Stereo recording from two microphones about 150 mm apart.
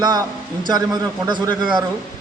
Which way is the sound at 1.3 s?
30° right (ahead or behind).